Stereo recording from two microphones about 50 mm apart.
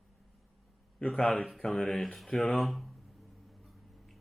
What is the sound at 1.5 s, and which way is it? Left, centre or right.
Speech, centre.